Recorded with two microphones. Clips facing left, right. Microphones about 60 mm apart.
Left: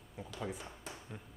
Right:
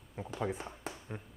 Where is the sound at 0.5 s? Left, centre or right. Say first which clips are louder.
Right 5 dB; right.